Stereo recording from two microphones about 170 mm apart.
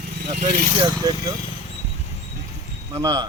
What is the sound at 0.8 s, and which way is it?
Speech, 25° right (ahead or behind).